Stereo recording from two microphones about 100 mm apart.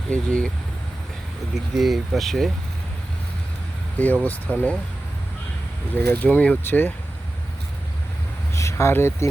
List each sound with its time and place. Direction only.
0.1 s speech: 10° left (ahead or behind)
1.7 s speech: centre (ahead or behind)
3.9 s speech: 15° left (ahead or behind)
5.9 s speech: 15° left (ahead or behind)
8.5 s speech: 30° left (ahead or behind)